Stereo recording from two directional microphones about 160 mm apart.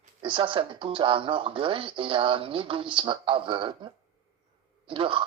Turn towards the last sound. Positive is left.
turn(degrees=-35)  # may be behind; listen again after turning